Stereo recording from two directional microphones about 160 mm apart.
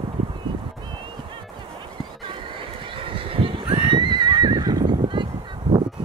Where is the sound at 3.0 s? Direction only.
35° right (ahead or behind).